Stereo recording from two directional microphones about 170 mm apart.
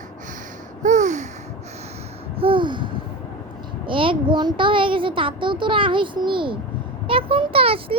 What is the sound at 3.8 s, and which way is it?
A child's voice, 30° right (ahead or behind).